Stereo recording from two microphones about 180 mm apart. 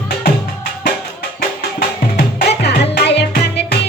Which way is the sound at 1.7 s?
60° left (ahead or behind).